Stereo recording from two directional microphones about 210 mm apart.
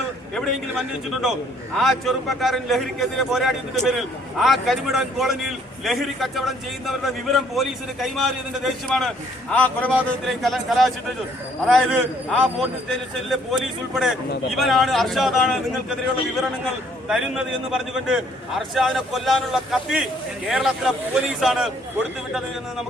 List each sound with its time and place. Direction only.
0.3 s a man's voice: centre (ahead or behind)
14.0 s a man's voice: centre (ahead or behind)
17.1 s a man's voice: 5° right (ahead or behind)